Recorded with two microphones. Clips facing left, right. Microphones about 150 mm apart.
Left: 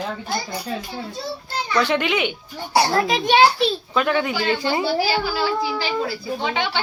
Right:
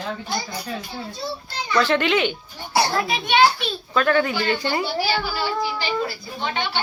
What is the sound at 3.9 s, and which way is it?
Speech, 15° left (ahead or behind).